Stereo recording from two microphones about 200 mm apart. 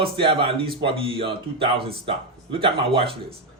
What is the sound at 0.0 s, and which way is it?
Speech, 25° right (ahead or behind).